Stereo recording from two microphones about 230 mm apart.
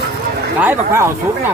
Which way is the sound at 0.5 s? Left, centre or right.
Centre.